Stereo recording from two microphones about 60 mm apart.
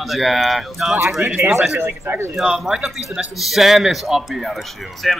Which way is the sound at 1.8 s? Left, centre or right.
Right.